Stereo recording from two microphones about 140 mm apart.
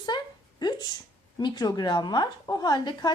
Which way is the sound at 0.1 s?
30° left (ahead or behind).